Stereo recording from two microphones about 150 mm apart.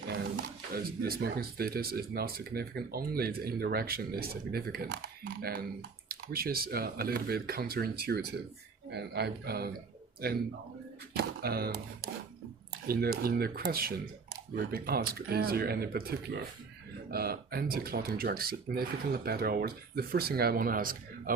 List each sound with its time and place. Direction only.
0.7 s speech: 85° right
11.2 s speech: 90° right; by 21.3 s 70° right (ahead or behind)